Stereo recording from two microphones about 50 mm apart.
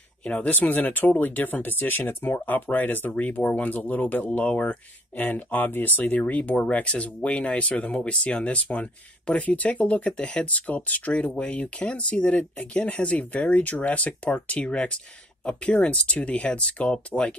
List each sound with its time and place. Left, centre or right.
0.2 s speech: left